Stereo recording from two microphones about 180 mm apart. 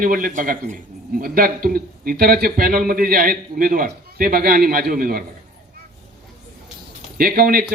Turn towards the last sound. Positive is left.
turn(degrees=-55)  # may be behind; listen again after turning